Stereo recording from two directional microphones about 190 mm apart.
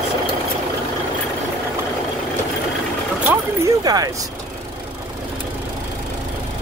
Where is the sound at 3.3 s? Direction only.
15° right (ahead or behind).